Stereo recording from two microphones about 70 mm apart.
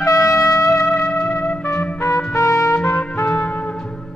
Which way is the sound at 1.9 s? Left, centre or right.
Left.